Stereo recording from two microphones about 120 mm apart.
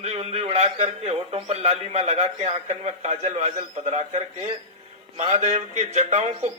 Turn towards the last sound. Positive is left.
turn(degrees=-70)  # may be behind; listen again after turning